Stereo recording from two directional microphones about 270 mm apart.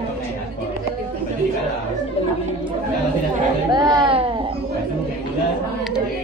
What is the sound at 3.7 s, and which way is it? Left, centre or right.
Speech, centre.